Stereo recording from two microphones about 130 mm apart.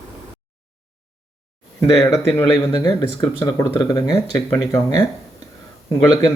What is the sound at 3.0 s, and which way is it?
Speech, 25° left (ahead or behind).